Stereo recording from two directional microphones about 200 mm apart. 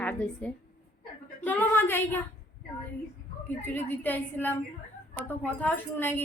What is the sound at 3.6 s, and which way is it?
A woman's voice, 10° left (ahead or behind).